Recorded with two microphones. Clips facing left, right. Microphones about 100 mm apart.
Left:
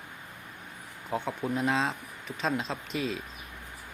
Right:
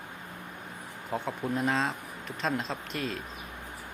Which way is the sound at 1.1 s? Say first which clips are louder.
Left 1 dB; centre (ahead or behind).